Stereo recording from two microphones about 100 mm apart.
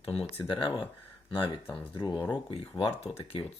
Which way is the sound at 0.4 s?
55° left (ahead or behind).